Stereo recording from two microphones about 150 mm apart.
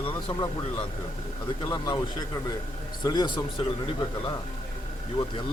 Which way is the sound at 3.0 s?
30° left (ahead or behind).